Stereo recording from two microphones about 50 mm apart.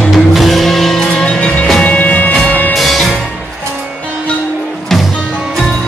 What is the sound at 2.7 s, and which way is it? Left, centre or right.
Music, centre.